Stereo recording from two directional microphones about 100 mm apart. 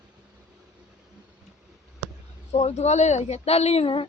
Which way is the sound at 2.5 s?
90° left.